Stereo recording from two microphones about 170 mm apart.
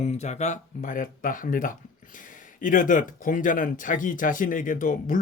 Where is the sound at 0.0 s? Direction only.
40° left (ahead or behind).